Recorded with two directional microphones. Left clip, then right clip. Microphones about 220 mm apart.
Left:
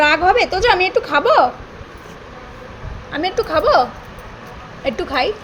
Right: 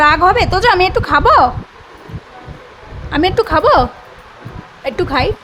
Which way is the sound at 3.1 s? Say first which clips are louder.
Right 5 dB; 25° right (ahead or behind).